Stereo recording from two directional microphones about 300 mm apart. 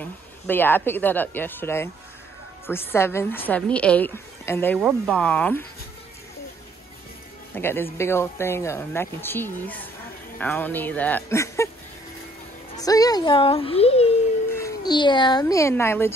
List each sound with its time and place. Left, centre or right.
0.0 s speech: centre
7.5 s speech: centre
12.7 s speech: centre